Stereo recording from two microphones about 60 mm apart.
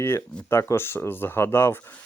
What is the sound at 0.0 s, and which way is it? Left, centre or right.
Speech, left.